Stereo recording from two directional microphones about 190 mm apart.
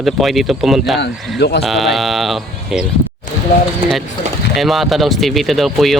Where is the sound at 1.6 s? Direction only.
Centre (ahead or behind).